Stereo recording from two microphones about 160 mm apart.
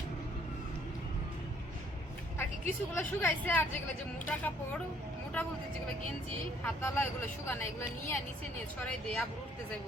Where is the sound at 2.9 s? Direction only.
15° left (ahead or behind).